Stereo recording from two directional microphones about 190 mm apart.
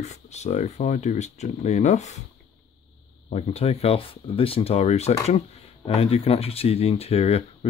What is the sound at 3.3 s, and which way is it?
Speech, 30° left (ahead or behind).